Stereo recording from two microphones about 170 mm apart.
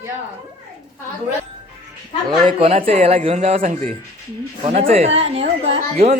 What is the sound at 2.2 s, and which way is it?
Speech, 30° right (ahead or behind).